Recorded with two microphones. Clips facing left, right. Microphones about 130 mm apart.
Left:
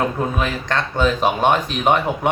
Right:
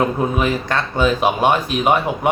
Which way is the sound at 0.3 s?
10° right (ahead or behind).